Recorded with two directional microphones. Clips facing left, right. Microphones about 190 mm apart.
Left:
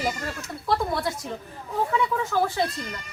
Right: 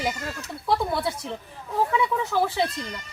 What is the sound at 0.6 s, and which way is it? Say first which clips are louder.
Speech: right 1 dB; centre (ahead or behind).